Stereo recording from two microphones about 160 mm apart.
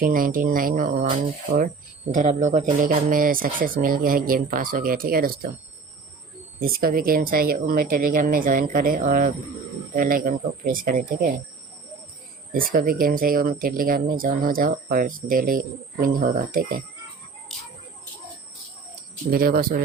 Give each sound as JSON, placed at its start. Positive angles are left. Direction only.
{"t": 0.0, "sound": "speech", "side_deg": -60}
{"t": 2.1, "sound": "speech", "side_deg": -50}
{"t": 6.6, "sound": "speech", "side_deg": -70}
{"t": 12.5, "sound": "speech", "side_deg": -65}
{"t": 19.3, "sound": "speech", "side_deg": -70}